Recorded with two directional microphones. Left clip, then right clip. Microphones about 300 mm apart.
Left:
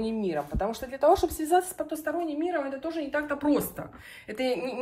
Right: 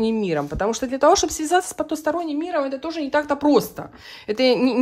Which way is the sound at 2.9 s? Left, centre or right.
Centre.